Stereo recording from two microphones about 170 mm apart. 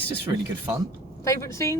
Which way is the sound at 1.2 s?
20° left (ahead or behind).